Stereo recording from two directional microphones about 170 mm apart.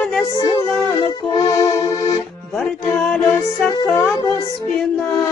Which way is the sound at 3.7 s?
20° left (ahead or behind).